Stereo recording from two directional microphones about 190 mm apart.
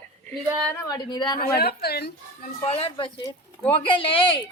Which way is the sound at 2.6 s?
30° left (ahead or behind).